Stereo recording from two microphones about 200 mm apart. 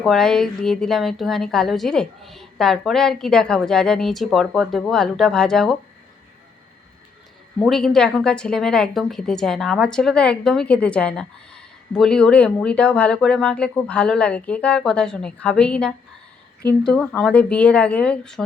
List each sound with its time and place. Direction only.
0.0 s a woman's voice: centre (ahead or behind)
7.6 s a woman's voice: centre (ahead or behind)